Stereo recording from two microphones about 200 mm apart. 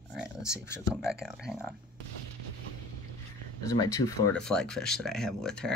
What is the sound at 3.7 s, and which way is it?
Speech, 15° left (ahead or behind).